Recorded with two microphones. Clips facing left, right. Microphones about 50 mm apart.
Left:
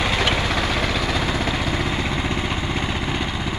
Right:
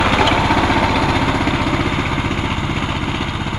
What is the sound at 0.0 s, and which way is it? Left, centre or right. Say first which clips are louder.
Vehicle: right 7 dB; right.